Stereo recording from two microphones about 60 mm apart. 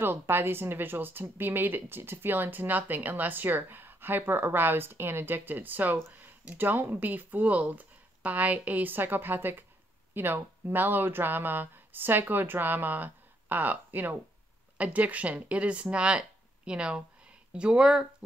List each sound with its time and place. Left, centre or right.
0.0 s speech: right; by 18.0 s centre